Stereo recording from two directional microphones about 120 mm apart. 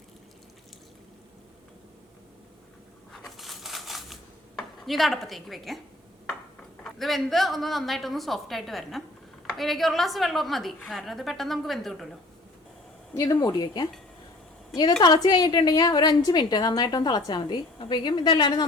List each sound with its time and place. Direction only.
3.1 s chopping: centre (ahead or behind)
7.0 s a woman's voice: centre (ahead or behind)
13.1 s a woman's voice: 35° left (ahead or behind)
15.0 s a woman's voice: 35° left (ahead or behind)